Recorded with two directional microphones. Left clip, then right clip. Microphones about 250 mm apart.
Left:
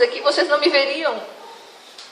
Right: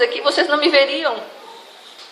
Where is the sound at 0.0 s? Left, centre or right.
Right.